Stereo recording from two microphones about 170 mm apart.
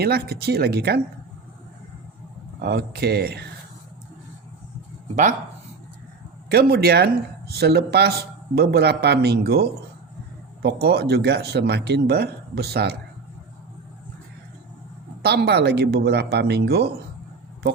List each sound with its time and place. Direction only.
0.0 s speech: 65° right (ahead or behind)
2.6 s a man's voice: 65° right (ahead or behind)
6.5 s a man's voice: 65° right (ahead or behind)
15.2 s a man's voice: 70° right (ahead or behind)